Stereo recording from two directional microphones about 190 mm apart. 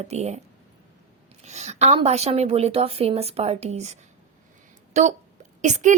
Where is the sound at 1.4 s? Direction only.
35° right (ahead or behind).